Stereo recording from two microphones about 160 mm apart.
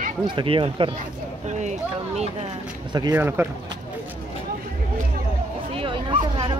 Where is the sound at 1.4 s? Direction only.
45° right (ahead or behind).